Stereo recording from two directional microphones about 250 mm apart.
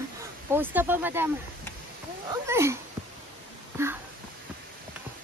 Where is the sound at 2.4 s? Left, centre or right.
Centre.